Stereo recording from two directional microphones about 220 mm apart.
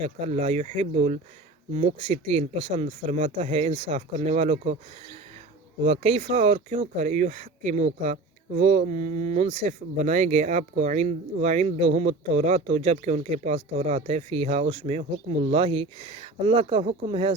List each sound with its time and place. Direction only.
0.0 s speech: 30° right (ahead or behind)
5.8 s speech: 25° right (ahead or behind)